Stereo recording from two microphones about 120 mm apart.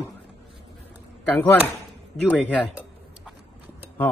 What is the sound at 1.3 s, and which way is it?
Speech, 15° left (ahead or behind).